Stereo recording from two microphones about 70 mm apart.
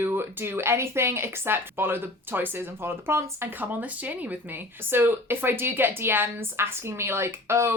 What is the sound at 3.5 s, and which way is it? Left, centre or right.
Speech, right.